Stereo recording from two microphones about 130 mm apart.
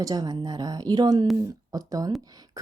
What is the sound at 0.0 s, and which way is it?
A woman's voice, 30° right (ahead or behind).